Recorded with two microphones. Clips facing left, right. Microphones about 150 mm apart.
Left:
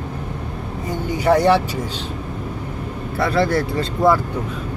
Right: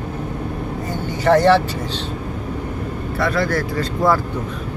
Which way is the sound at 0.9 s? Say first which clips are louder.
Right 1 dB; 10° left (ahead or behind).